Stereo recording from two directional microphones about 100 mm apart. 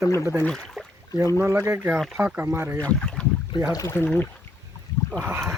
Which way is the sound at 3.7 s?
35° left (ahead or behind).